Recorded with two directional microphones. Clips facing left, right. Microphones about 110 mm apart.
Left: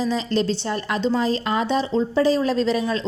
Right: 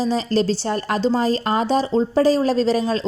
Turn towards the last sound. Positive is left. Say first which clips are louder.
# right 3 dB
turn(degrees=-35)  # may be behind; listen again after turning